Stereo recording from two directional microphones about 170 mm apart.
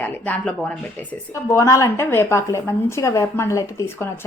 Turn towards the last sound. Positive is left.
turn(degrees=15)  # may be behind; listen again after turning